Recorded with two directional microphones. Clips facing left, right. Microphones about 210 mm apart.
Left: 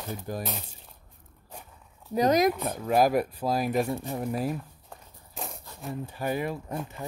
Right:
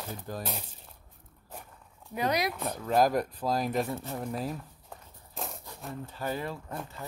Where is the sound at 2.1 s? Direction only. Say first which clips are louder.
Left 7 dB; 40° left (ahead or behind).